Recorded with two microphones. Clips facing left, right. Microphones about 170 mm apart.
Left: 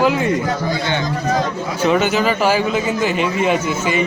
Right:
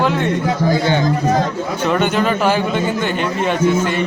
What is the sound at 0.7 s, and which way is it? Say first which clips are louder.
Speech: right 5 dB; 40° right (ahead or behind).